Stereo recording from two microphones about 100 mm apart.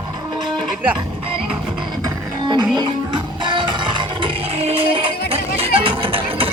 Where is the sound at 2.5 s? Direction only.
50° right (ahead or behind).